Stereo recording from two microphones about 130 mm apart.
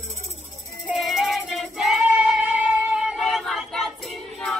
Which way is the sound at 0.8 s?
5° right (ahead or behind).